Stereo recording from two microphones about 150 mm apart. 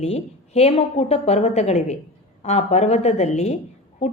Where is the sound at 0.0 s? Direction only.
45° left (ahead or behind).